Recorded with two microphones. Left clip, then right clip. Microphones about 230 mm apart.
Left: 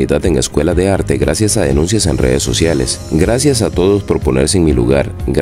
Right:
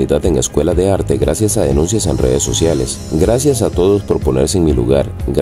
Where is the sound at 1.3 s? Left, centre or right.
Left.